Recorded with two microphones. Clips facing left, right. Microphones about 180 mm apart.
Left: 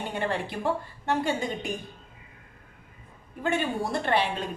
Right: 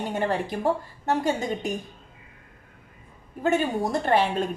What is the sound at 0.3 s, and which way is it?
A woman's voice, 40° right (ahead or behind).